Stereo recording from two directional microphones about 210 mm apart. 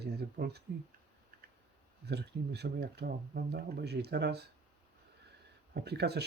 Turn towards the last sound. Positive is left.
turn(degrees=-50)  # may be behind; listen again after turning